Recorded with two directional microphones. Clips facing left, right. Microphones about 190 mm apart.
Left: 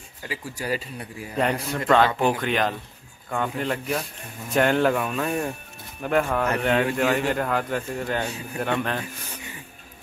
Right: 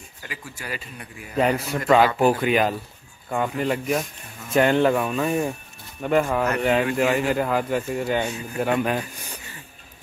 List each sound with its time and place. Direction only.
0.3 s speech: 35° left (ahead or behind)
1.3 s speech: centre (ahead or behind)